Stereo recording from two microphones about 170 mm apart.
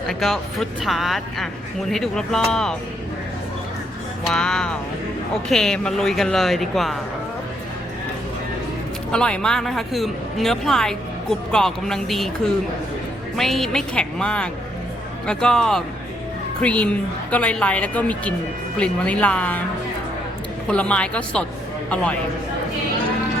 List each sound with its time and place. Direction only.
0.1 s a woman's voice: centre (ahead or behind)
4.3 s a woman's voice: 5° left (ahead or behind)
9.1 s a woman's voice: 5° left (ahead or behind)
13.3 s a woman's voice: centre (ahead or behind)
20.7 s a woman's voice: 5° left (ahead or behind)